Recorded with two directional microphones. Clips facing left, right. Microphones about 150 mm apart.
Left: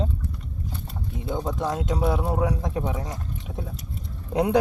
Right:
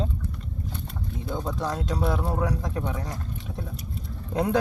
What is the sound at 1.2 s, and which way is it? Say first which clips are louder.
A man's voice: left 3 dB; 20° left (ahead or behind).